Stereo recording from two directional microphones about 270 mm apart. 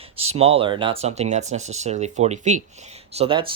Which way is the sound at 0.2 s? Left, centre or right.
Right.